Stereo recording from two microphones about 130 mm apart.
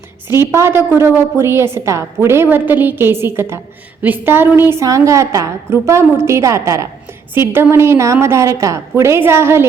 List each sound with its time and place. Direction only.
0.3 s a woman's voice: 20° right (ahead or behind)